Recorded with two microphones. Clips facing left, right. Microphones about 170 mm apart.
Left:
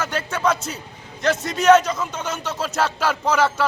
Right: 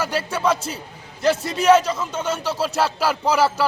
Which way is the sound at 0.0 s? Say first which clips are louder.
Right 1 dB; 10° right (ahead or behind).